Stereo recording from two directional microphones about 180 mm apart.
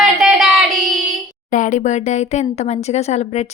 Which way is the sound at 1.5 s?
45° left (ahead or behind).